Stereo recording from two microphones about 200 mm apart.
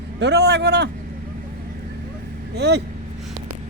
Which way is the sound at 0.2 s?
55° right (ahead or behind).